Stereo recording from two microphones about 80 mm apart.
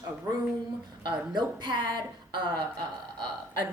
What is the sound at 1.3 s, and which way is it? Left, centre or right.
Speech, right.